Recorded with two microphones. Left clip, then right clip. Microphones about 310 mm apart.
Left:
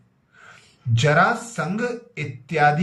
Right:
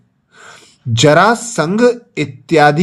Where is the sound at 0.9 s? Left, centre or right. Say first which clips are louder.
Right 9 dB; centre.